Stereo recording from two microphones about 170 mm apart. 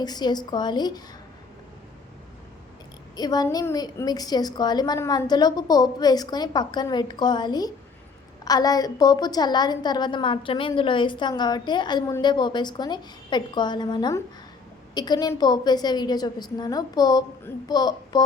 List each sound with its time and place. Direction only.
0.0 s a woman's voice: 25° left (ahead or behind)
3.2 s a woman's voice: 25° left (ahead or behind)